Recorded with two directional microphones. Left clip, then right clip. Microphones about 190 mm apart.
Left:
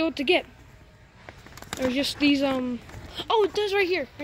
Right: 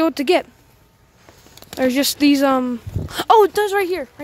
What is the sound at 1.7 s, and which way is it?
Speech, 50° right (ahead or behind).